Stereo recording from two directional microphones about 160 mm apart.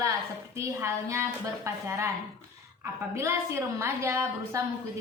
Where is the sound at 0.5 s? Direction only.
15° right (ahead or behind).